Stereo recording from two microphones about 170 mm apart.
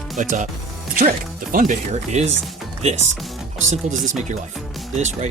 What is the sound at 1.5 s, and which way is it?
Speech, 50° right (ahead or behind).